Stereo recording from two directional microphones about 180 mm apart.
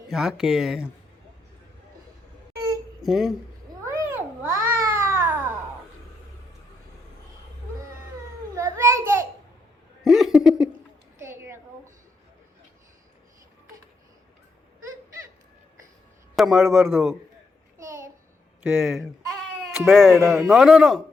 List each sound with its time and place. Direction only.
0.1 s a man's voice: centre (ahead or behind)
3.0 s speech: centre (ahead or behind)
3.8 s babbling: 15° right (ahead or behind)
8.5 s a sound: 15° right (ahead or behind)
10.0 s laughter: centre (ahead or behind)
11.2 s a sound: 15° right (ahead or behind)
16.3 s a man's voice: centre (ahead or behind)
18.7 s a man's voice: 5° right (ahead or behind)